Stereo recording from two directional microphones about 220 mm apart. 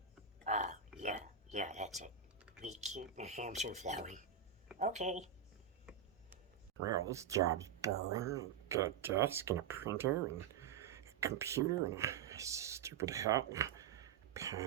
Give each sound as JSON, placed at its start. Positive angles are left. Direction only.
{"t": 0.4, "sound": "whispering", "side_deg": -35}
{"t": 0.9, "sound": "a sound", "side_deg": -35}
{"t": 2.6, "sound": "speech", "side_deg": -30}
{"t": 6.8, "sound": "speech", "side_deg": -15}